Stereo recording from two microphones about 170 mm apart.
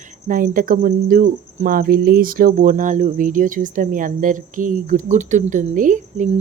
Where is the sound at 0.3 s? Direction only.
55° right (ahead or behind).